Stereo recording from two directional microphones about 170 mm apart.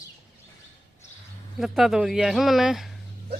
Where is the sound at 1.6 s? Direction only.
Centre (ahead or behind).